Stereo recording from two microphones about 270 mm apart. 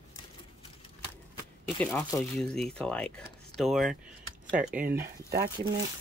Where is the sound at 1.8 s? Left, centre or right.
Centre.